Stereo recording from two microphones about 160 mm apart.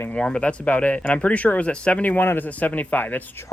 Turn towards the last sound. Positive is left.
turn(degrees=10)  # may be behind; listen again after turning